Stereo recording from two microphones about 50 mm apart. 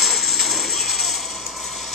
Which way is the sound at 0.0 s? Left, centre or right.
Centre.